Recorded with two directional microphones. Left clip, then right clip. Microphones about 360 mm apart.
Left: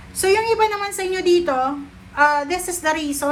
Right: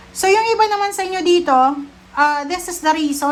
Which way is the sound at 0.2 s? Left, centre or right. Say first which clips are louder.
Right 3 dB; centre.